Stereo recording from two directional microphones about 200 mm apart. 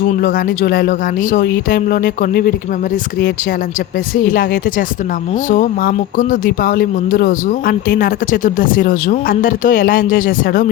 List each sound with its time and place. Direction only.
0.2 s speech: 45° left (ahead or behind)
4.1 s speech: 45° left (ahead or behind)
5.5 s speech: 40° left (ahead or behind)